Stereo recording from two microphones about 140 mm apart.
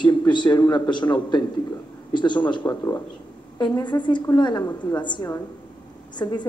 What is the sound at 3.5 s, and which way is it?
A man's voice, 30° left (ahead or behind).